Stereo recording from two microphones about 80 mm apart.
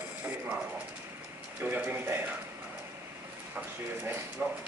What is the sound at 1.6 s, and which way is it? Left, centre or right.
Speech, right.